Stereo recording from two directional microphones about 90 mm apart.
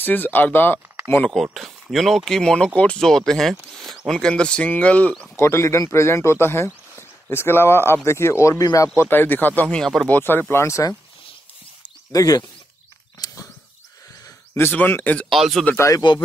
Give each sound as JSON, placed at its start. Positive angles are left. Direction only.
{"t": 0.0, "sound": "speech", "side_deg": 20}
{"t": 1.3, "sound": "speech", "side_deg": 0}
{"t": 4.2, "sound": "speech", "side_deg": 10}
{"t": 5.4, "sound": "speech", "side_deg": 30}
{"t": 9.8, "sound": "speech", "side_deg": 5}
{"t": 10.0, "sound": "speech", "side_deg": 20}
{"t": 12.1, "sound": "speech", "side_deg": 40}
{"t": 13.2, "sound": "a sound", "side_deg": 35}
{"t": 14.5, "sound": "speech", "side_deg": 30}
{"t": 14.8, "sound": "speech", "side_deg": 20}
{"t": 15.2, "sound": "speech", "side_deg": 0}
{"t": 15.7, "sound": "speech", "side_deg": 30}